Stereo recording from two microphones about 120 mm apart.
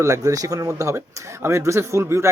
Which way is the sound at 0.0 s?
25° right (ahead or behind).